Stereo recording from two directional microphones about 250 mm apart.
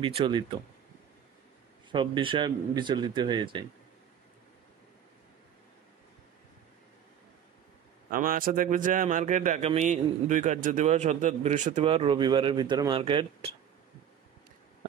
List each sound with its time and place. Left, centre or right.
0.0 s a man's voice: centre
1.9 s a man's voice: centre
8.1 s a man's voice: right